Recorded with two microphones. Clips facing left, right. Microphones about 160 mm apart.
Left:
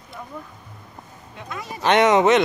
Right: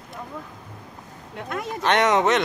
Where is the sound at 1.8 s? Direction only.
5° left (ahead or behind).